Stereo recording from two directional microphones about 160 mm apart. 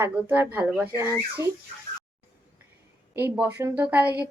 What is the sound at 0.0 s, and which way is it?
A woman's voice, 15° right (ahead or behind).